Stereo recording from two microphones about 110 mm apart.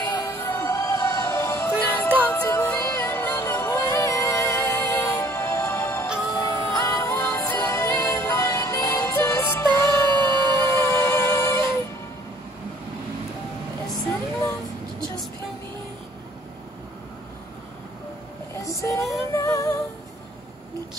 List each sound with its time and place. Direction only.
0.2 s music: 20° left (ahead or behind)
2.4 s music: 30° left (ahead or behind)
6.0 s music: 5° right (ahead or behind)
6.6 s music: 25° left (ahead or behind)
18.6 s music: 30° left (ahead or behind)